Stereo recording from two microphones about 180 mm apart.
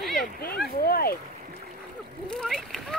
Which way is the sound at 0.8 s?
55° left (ahead or behind).